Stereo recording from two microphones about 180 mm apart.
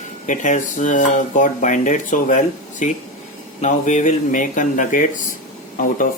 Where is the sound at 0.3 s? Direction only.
40° left (ahead or behind).